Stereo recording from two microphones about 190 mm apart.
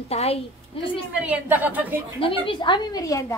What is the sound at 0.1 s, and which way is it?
Speech, 30° left (ahead or behind).